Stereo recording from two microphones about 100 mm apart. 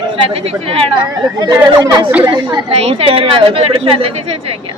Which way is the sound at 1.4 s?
45° right (ahead or behind).